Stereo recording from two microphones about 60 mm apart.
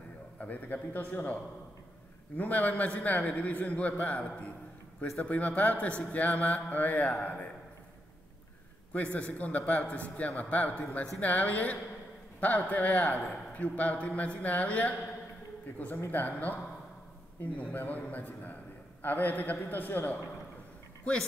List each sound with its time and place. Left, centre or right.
0.4 s a man's voice: left
8.9 s a man's voice: left
16.1 s a man's voice: left
17.6 s a man's voice: left